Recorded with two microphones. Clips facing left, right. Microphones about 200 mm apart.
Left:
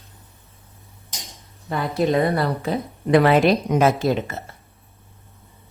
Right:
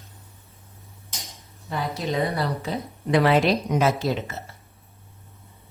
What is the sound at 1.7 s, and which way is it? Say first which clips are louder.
A woman's voice: left 7 dB; 55° left (ahead or behind).